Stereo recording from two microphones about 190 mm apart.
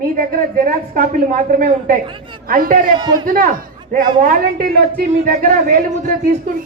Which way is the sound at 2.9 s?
20° right (ahead or behind).